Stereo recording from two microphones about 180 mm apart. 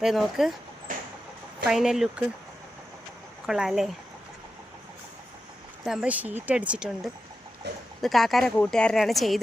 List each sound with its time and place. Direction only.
0.0 s speech: centre (ahead or behind)
1.6 s speech: 5° right (ahead or behind)
3.4 s speech: 5° right (ahead or behind)
5.8 s speech: 5° right (ahead or behind)